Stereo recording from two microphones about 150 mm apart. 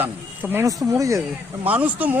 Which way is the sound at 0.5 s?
20° right (ahead or behind).